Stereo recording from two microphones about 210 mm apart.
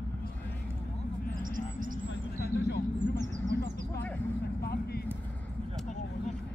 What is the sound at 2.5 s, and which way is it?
Vehicle, 50° left (ahead or behind).